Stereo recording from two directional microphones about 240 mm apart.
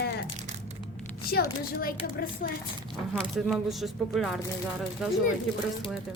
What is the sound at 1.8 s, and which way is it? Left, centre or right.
Speech, left.